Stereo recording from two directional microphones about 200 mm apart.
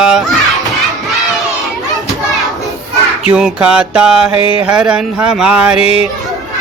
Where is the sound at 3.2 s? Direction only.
5° right (ahead or behind).